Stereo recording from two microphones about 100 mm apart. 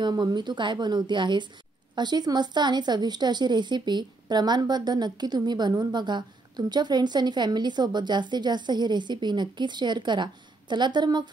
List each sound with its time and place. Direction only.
0.0 s a woman's voice: 45° right (ahead or behind)